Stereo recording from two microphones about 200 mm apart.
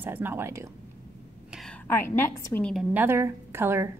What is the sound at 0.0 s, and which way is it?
Speech, 10° right (ahead or behind).